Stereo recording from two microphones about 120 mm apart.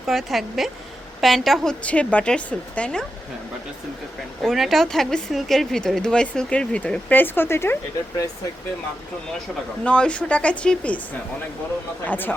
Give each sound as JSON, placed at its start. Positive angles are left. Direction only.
{"t": 0.1, "sound": "speech", "side_deg": 0}
{"t": 4.4, "sound": "speech", "side_deg": 0}
{"t": 9.8, "sound": "speech", "side_deg": 10}
{"t": 12.0, "sound": "speech", "side_deg": 15}